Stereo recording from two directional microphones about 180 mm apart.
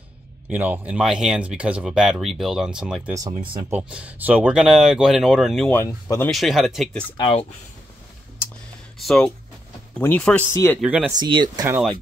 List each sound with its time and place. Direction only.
0.5 s speech: 10° right (ahead or behind)
5.7 s speech: 15° left (ahead or behind)
6.2 s speech: centre (ahead or behind)
7.2 s speech: 30° left (ahead or behind)
9.0 s speech: 5° left (ahead or behind)
10.8 s speech: 5° right (ahead or behind)
11.1 s speech: 25° right (ahead or behind)